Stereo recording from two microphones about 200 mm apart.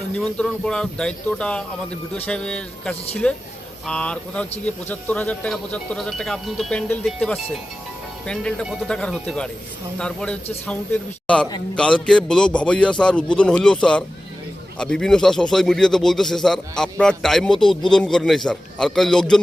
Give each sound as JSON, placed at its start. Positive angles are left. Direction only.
{"t": 0.2, "sound": "speech", "side_deg": 5}
{"t": 11.4, "sound": "a man's voice", "side_deg": 20}
{"t": 12.0, "sound": "speech", "side_deg": 5}